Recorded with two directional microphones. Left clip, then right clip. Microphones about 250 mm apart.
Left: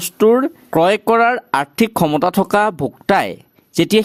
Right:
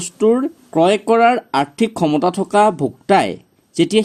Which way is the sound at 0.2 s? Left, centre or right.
Left.